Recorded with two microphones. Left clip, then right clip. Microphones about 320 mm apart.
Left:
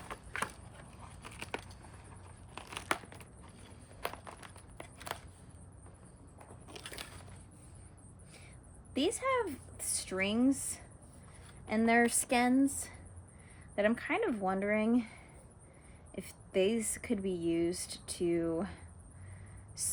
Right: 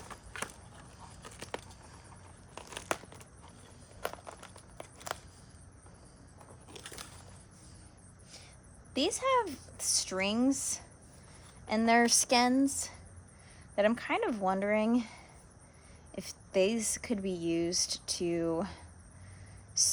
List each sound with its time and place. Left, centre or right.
1.4 s a sound: centre
2.6 s crumpling: centre
4.8 s walk: centre
6.7 s crushing: centre
8.9 s speech: centre
19.8 s cricket: right